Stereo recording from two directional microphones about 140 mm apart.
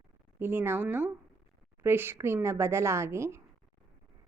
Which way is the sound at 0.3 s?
15° right (ahead or behind).